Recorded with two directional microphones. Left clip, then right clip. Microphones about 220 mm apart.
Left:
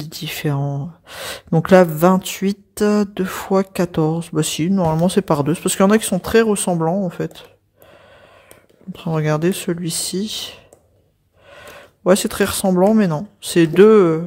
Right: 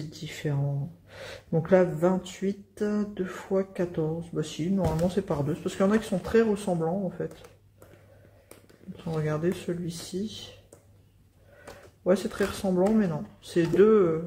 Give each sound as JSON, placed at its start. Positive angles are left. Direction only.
{"t": 0.1, "sound": "speech", "side_deg": 50}
{"t": 9.0, "sound": "speech", "side_deg": 50}
{"t": 12.0, "sound": "speech", "side_deg": 50}